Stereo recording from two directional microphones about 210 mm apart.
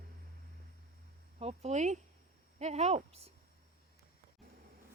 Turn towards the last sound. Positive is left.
turn(degrees=-30)  # may be behind; listen again after turning